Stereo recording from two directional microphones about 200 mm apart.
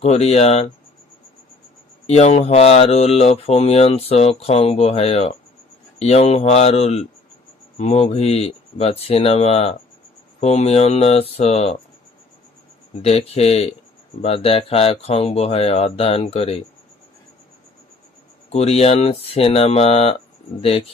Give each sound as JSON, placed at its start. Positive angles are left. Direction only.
{"t": 0.0, "sound": "mantra", "side_deg": 30}
{"t": 2.0, "sound": "mantra", "side_deg": 35}
{"t": 13.0, "sound": "mantra", "side_deg": 30}
{"t": 14.2, "sound": "speech", "side_deg": 30}
{"t": 18.5, "sound": "speech", "side_deg": 30}